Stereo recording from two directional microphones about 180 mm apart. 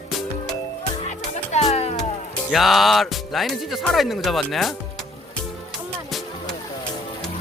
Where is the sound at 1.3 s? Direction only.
40° left (ahead or behind).